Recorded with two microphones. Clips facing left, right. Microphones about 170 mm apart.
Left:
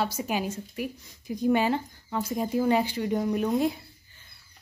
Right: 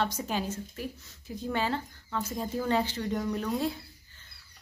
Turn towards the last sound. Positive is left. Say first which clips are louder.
# left 5 dB
turn(degrees=15)  # may be behind; listen again after turning